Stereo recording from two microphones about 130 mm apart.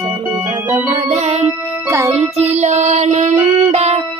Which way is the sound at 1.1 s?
60° right (ahead or behind).